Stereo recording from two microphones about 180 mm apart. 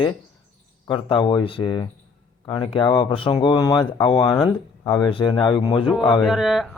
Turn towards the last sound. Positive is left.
turn(degrees=0)  # may be behind; listen again after turning